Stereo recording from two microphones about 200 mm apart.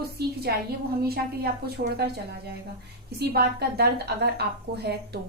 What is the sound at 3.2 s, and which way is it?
A woman's voice, 55° right (ahead or behind).